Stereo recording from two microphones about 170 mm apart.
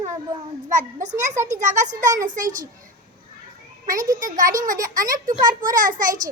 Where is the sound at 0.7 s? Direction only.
50° right (ahead or behind).